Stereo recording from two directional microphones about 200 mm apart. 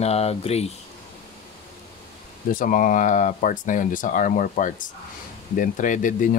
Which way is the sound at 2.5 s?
45° left (ahead or behind).